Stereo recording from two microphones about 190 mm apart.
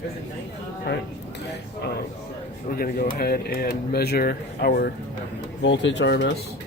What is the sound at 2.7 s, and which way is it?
Speech, 50° left (ahead or behind).